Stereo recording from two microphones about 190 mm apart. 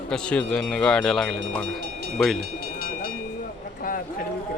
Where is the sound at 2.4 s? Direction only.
55° right (ahead or behind).